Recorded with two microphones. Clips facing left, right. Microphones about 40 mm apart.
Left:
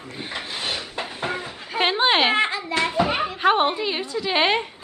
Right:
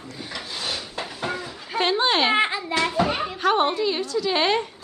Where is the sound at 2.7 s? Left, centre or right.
Centre.